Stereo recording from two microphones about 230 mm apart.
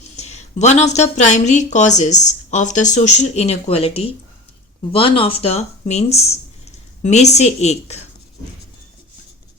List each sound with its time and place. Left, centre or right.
0.2 s speech: left